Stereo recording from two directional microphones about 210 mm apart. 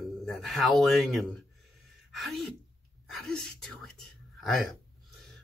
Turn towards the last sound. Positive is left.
turn(degrees=0)  # may be behind; listen again after turning